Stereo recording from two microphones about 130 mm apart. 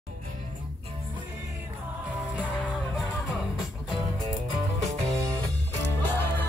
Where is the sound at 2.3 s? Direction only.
10° right (ahead or behind).